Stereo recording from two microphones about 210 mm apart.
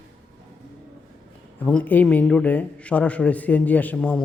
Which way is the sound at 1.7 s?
5° left (ahead or behind).